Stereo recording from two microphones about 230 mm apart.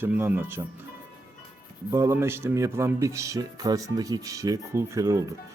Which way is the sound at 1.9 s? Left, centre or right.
Centre.